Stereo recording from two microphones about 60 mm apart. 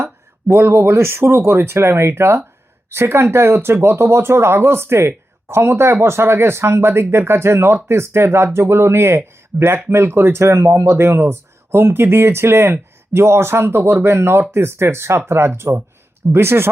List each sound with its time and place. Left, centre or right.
0.0 s speech: right